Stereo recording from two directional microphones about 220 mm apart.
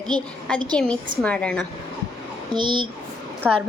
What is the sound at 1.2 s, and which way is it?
Speech, 5° left (ahead or behind).